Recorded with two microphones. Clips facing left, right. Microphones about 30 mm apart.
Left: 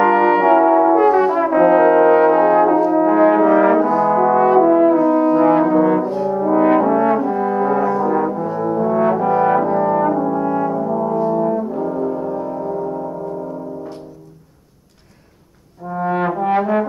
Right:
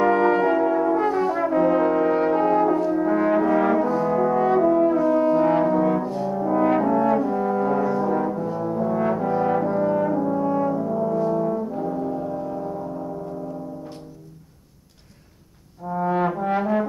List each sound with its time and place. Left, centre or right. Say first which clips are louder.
0.0 s brass instrument: left 5 dB; left
4.9 s brass instrument: left 5 dB; centre
9.7 s french horn: left 5 dB; centre
11.7 s brass instrument: left 5 dB; centre
15.9 s brass instrument: left 3 dB; left